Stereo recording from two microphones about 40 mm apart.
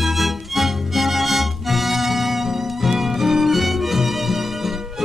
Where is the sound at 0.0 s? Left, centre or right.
Centre.